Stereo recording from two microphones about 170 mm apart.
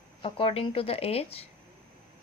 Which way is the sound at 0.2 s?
30° left (ahead or behind).